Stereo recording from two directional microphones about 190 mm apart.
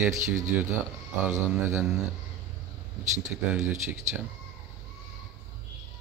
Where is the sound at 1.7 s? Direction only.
10° right (ahead or behind).